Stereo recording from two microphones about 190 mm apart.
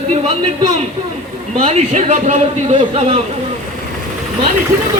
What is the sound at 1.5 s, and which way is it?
A man's voice, 35° right (ahead or behind).